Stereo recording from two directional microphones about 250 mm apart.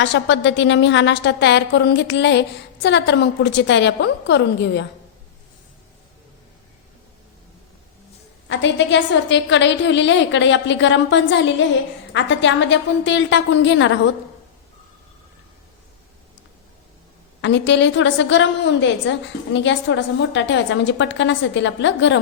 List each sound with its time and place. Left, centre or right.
0.0 s a woman's voice: left
8.4 s a woman's voice: left
17.4 s a woman's voice: left